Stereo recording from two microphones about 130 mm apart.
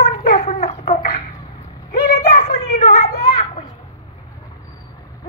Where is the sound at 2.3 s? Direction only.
55° left (ahead or behind).